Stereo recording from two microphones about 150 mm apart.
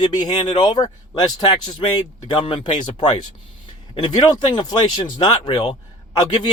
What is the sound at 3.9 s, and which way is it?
Speech, 30° left (ahead or behind).